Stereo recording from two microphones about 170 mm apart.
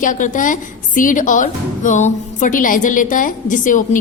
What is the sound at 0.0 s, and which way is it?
A woman's voice, 50° left (ahead or behind).